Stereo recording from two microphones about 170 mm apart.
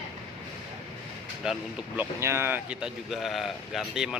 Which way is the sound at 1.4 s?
5° right (ahead or behind).